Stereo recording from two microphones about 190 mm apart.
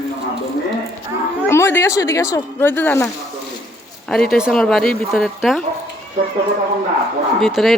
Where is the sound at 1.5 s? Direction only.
15° left (ahead or behind).